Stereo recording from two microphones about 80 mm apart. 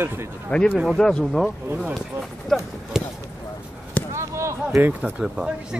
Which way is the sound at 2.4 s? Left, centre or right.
Centre.